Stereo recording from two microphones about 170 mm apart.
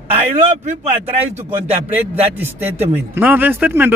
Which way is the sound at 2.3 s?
10° right (ahead or behind).